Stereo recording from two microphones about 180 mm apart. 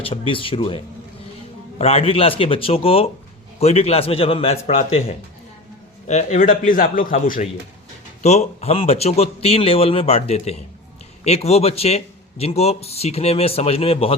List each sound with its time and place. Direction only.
0.0 s speech: 30° left (ahead or behind)
1.8 s a man's voice: 35° left (ahead or behind); by 7.4 s 50° left (ahead or behind)
8.2 s speech: 35° left (ahead or behind)